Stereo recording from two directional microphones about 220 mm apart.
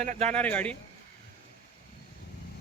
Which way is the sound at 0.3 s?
5° left (ahead or behind).